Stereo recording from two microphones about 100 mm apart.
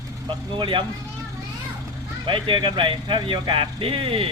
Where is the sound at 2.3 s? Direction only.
55° right (ahead or behind).